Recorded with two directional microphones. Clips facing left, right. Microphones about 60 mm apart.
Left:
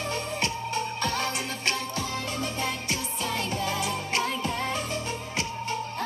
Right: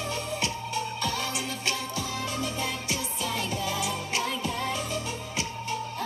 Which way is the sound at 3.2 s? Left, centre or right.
Left.